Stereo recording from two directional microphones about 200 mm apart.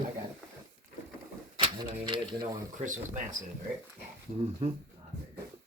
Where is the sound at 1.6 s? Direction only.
25° right (ahead or behind).